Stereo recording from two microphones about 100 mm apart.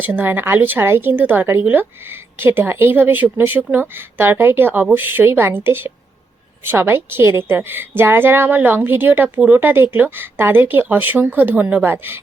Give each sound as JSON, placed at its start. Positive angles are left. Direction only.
{"t": 0.0, "sound": "a woman's voice", "side_deg": -20}